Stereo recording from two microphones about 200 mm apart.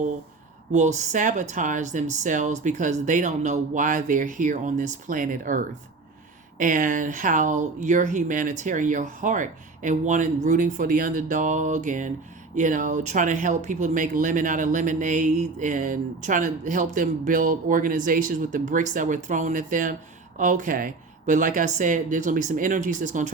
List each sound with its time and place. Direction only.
0.7 s speech: 35° right (ahead or behind)